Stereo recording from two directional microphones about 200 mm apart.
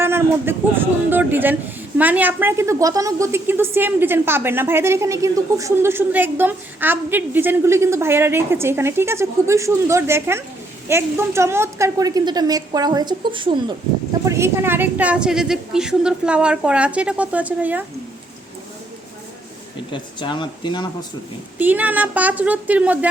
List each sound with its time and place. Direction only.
0.0 s a woman's voice: 10° right (ahead or behind)
14.3 s a woman's voice: 15° right (ahead or behind)
19.9 s speech: 25° left (ahead or behind)
21.6 s a woman's voice: 10° right (ahead or behind)